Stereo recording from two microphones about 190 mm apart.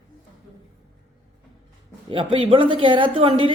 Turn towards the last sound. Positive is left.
turn(degrees=-30)  # may be behind; listen again after turning